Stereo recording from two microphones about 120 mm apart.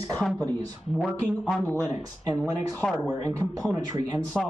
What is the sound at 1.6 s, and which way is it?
Speech, 15° left (ahead or behind).